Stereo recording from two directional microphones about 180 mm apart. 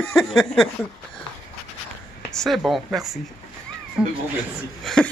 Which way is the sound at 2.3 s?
Centre (ahead or behind).